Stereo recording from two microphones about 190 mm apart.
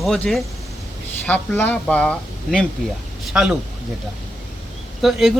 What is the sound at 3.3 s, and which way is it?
Speech, 5° right (ahead or behind).